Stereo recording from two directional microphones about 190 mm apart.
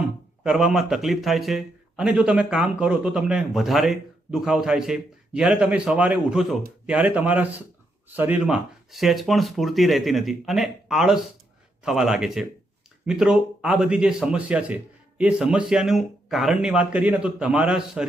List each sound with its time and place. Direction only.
0.4 s a man's voice: centre (ahead or behind)